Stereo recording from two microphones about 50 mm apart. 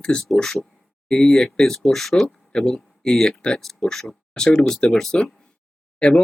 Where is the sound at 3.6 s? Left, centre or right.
Centre.